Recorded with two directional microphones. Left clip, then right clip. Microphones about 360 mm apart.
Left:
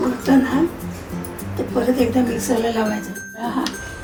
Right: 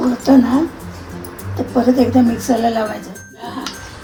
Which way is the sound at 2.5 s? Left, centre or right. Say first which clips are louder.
Right 2 dB; centre.